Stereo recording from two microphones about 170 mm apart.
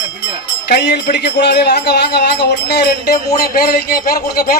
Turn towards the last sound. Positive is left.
turn(degrees=60)  # may be behind; listen again after turning